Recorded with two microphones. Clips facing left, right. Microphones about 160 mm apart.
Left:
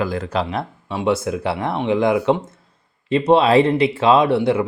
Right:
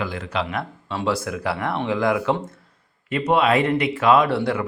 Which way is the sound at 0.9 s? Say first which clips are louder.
Left 5 dB; 20° left (ahead or behind).